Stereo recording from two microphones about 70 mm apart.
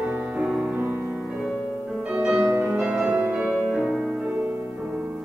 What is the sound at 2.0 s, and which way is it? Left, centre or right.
Music, centre.